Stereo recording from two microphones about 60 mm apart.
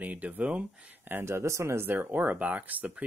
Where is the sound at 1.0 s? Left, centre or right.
Right.